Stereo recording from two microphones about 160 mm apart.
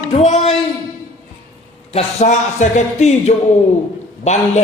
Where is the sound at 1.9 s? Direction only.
45° left (ahead or behind).